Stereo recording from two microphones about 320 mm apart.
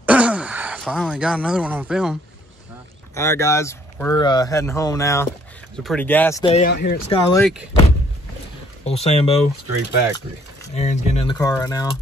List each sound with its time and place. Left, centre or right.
0.0 s a sound: centre
3.2 s speech: centre
6.7 s speech: left
7.1 s speech: centre
8.8 s speech: centre
10.7 s speech: left